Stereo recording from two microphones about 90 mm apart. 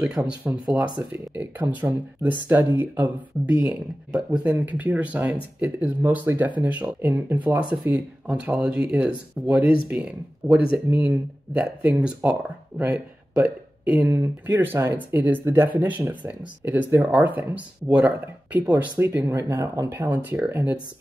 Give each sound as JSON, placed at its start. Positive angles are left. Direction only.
{"t": 0.1, "sound": "speech", "side_deg": -10}
{"t": 1.3, "sound": "speech", "side_deg": -20}
{"t": 3.6, "sound": "speech", "side_deg": -10}